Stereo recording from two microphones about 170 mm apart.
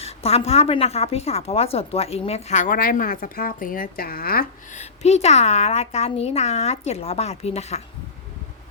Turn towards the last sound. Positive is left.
turn(degrees=40)  # may be behind; listen again after turning